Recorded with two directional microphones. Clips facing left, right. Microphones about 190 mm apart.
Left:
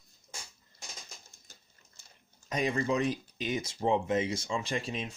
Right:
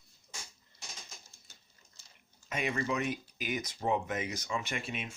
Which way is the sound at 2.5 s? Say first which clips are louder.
Left 4 dB; 35° left (ahead or behind).